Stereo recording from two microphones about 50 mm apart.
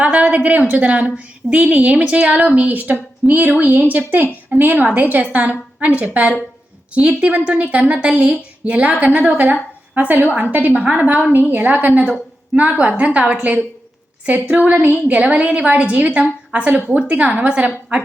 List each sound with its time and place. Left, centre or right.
0.0 s a woman's voice: right
12.5 s a woman's voice: right
14.7 s a woman's voice: right